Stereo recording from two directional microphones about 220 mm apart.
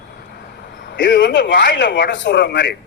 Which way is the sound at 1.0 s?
55° left (ahead or behind).